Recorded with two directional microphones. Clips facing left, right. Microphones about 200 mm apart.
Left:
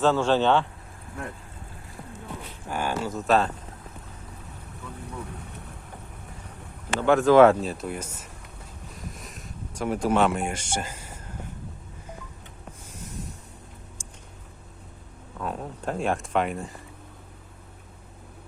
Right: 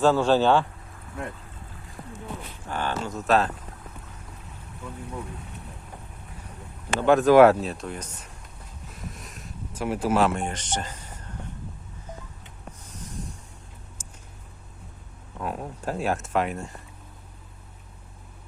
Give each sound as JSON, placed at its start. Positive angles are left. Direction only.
{"t": 0.0, "sound": "speech", "side_deg": -10}
{"t": 2.6, "sound": "speech", "side_deg": 10}
{"t": 7.0, "sound": "speech", "side_deg": -15}
{"t": 7.6, "sound": "speech", "side_deg": 0}
{"t": 9.0, "sound": "a sound", "side_deg": 0}
{"t": 14.0, "sound": "a sound", "side_deg": -5}
{"t": 15.4, "sound": "speech", "side_deg": -10}